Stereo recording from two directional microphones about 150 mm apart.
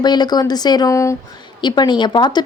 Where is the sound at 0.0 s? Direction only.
30° left (ahead or behind).